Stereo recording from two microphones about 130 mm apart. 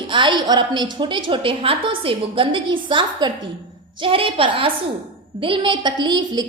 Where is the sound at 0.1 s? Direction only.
40° right (ahead or behind).